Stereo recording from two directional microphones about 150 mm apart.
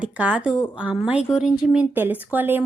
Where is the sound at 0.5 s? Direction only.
15° left (ahead or behind).